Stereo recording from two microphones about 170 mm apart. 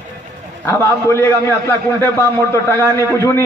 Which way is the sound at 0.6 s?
15° left (ahead or behind).